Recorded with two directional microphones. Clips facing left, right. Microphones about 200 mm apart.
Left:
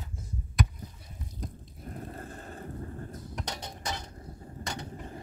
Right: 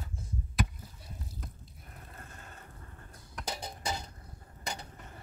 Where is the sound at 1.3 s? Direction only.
35° left (ahead or behind).